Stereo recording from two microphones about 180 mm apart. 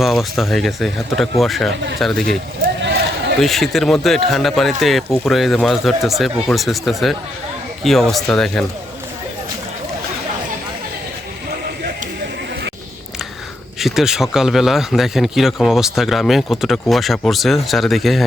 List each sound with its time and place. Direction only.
0.0 s speech: centre (ahead or behind)
2.6 s a sound: 50° right (ahead or behind)
3.3 s speech: centre (ahead or behind)
13.7 s speech: centre (ahead or behind)